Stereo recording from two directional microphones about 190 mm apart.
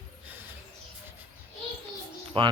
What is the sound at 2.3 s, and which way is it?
Speech, 30° right (ahead or behind).